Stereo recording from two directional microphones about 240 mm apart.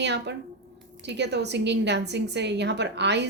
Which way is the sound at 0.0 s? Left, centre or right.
Right.